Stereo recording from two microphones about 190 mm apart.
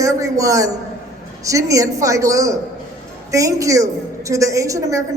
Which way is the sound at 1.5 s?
15° right (ahead or behind).